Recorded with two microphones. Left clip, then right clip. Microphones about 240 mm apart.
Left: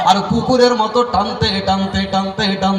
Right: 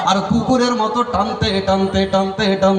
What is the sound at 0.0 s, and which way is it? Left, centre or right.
Music, centre.